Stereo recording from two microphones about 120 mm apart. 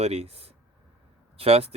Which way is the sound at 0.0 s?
60° right (ahead or behind).